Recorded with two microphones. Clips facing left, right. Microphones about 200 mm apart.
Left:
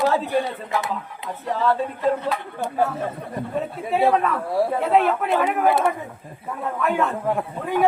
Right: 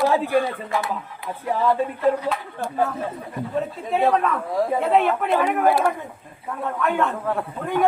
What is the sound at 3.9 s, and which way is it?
A man's voice, 5° left (ahead or behind).